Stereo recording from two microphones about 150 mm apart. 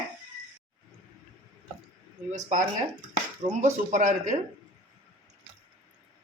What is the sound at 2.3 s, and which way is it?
Speech, 55° right (ahead or behind).